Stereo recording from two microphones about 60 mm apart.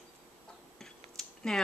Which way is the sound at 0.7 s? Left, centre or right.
Centre.